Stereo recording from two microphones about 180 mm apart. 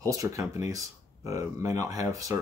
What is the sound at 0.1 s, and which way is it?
Speech, 20° right (ahead or behind).